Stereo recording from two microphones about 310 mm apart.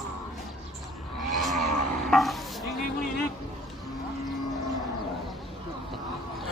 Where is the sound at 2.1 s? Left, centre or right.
Centre.